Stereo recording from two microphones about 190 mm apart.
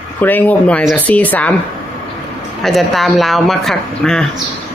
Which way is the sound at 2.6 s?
Centre (ahead or behind).